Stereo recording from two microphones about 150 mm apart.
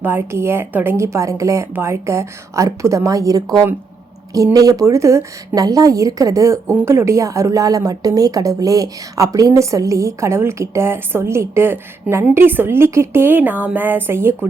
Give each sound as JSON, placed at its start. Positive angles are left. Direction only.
{"t": 0.0, "sound": "a woman's voice", "side_deg": -15}